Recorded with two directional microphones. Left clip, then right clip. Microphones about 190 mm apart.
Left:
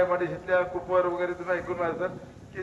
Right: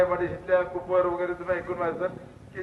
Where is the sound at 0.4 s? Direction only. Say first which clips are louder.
Right 3 dB; 15° left (ahead or behind).